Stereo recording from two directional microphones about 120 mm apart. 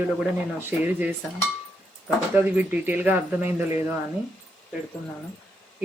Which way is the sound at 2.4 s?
15° right (ahead or behind).